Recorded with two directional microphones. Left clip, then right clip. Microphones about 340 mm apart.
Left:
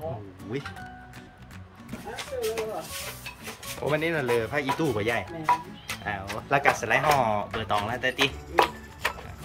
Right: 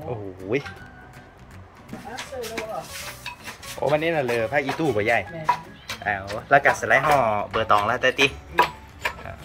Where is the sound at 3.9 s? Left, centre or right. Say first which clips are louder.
Right 3 dB; centre.